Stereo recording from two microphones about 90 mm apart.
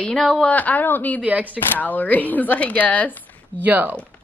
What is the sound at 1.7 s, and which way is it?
Speech, 20° left (ahead or behind).